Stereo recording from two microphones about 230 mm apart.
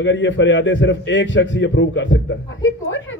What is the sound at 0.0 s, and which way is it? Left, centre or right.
A man's voice, left.